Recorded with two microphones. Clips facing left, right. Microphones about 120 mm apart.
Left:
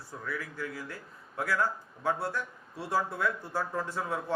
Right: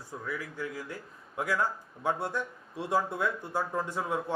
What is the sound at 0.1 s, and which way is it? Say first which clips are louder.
A man's voice: right 1 dB; 15° right (ahead or behind).